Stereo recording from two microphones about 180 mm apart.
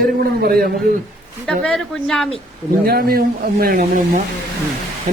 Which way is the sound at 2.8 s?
60° right (ahead or behind).